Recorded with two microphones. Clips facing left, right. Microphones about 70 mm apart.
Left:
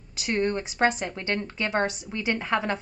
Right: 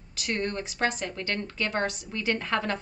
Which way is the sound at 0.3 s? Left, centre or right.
Centre.